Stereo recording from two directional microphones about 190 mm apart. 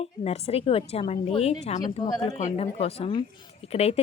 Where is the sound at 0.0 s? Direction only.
30° left (ahead or behind).